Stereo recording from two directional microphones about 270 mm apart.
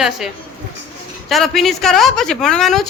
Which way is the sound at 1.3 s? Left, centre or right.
Centre.